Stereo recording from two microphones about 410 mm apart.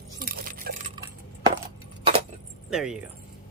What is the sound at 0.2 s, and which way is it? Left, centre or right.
Coin, right.